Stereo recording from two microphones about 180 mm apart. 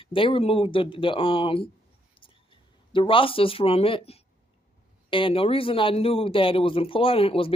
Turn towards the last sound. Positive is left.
turn(degrees=30)  # may be behind; listen again after turning